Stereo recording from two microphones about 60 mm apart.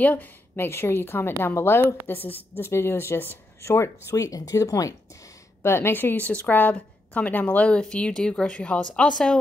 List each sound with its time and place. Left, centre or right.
0.0 s speech: left
4.1 s speech: left
5.6 s a woman's voice: left; by 9.4 s centre